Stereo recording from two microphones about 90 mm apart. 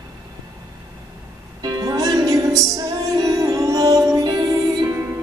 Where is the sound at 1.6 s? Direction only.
50° right (ahead or behind).